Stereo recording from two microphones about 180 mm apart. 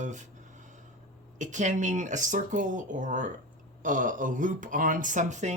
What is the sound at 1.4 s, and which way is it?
Speech, 45° right (ahead or behind).